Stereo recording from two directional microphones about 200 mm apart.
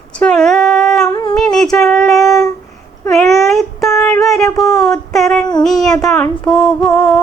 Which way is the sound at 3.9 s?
10° left (ahead or behind).